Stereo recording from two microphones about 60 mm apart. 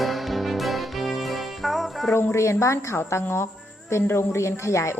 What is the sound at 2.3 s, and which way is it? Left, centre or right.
A woman's voice, left.